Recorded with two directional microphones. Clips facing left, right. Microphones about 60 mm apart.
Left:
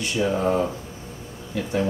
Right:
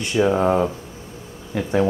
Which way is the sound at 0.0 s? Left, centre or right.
Right.